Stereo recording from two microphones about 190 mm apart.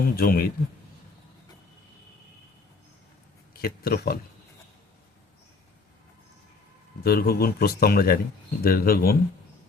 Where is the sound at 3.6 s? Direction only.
55° left (ahead or behind).